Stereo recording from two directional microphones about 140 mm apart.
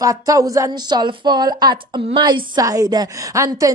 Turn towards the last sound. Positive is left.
turn(degrees=-25)  # may be behind; listen again after turning